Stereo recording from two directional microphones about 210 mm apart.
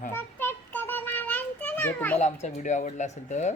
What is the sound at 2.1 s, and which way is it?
Speech, 30° left (ahead or behind).